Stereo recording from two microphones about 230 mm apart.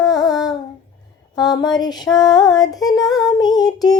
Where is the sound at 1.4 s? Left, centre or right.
Centre.